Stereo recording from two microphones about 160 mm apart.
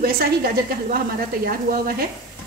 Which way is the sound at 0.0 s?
65° right (ahead or behind).